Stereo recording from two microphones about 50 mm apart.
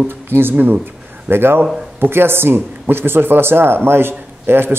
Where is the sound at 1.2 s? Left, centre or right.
Right.